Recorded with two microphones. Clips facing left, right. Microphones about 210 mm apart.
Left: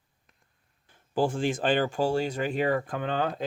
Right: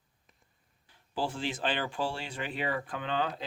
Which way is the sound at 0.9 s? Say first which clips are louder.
Left 8 dB; 50° left (ahead or behind).